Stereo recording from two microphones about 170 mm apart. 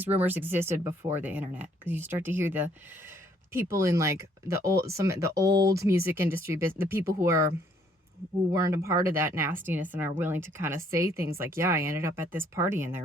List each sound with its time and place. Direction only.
0.0 s speech: 10° right (ahead or behind)
8.5 s speech: 20° right (ahead or behind)